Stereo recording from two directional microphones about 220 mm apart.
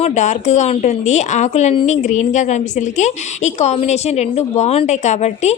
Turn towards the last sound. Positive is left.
turn(degrees=30)  # may be behind; listen again after turning